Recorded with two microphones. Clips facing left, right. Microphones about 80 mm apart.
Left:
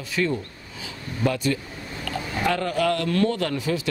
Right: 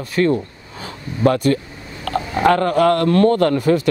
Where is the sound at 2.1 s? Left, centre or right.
Right.